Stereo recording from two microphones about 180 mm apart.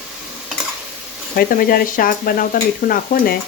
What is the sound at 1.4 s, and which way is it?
Speech, 55° left (ahead or behind).